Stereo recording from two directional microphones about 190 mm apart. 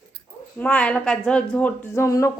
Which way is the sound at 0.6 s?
5° left (ahead or behind).